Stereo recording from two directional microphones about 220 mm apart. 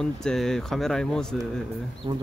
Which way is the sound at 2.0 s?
25° right (ahead or behind).